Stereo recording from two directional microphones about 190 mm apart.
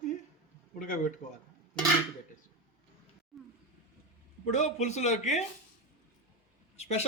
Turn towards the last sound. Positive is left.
turn(degrees=35)  # may be behind; listen again after turning